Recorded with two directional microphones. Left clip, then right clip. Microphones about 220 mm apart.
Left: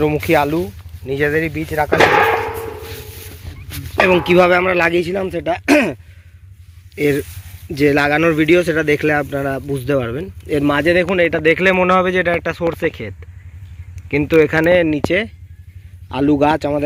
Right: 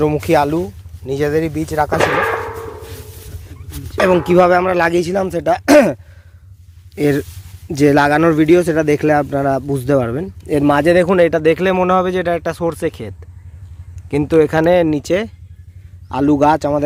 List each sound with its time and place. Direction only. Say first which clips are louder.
0.0 s speech: right 1 dB; 15° right (ahead or behind)
2.0 s whip: left 3 dB; 40° left (ahead or behind)
4.0 s speech: right 1 dB; 10° right (ahead or behind); by 5.9 s 35° right (ahead or behind)
6.9 s speech: right 1 dB; 25° right (ahead or behind)
14.3 s speech: even; 10° right (ahead or behind)